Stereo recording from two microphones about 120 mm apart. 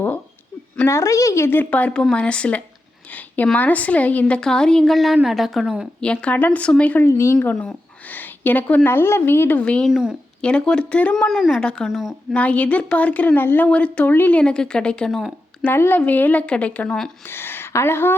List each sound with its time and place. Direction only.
0.9 s speech: 25° left (ahead or behind); by 5.9 s 5° right (ahead or behind)
6.0 s speech: 10° left (ahead or behind); by 7.3 s 25° left (ahead or behind)
7.6 s a woman's voice: 10° left (ahead or behind)
9.9 s a woman's voice: 5° right (ahead or behind)
10.4 s speech: 5° left (ahead or behind)
12.3 s speech: 10° left (ahead or behind)
15.6 s speech: 20° left (ahead or behind)